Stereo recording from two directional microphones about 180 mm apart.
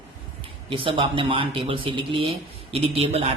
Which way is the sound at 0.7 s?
30° right (ahead or behind).